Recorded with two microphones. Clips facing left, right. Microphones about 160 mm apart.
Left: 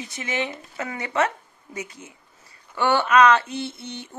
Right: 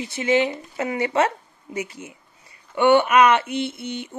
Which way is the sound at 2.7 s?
20° right (ahead or behind).